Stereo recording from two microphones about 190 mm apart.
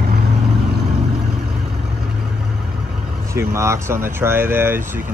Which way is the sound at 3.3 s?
15° right (ahead or behind).